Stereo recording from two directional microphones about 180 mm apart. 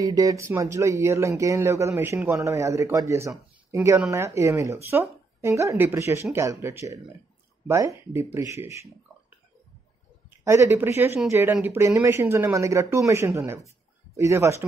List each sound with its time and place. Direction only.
0.0 s speech: 20° right (ahead or behind)
10.3 s speech: 15° right (ahead or behind)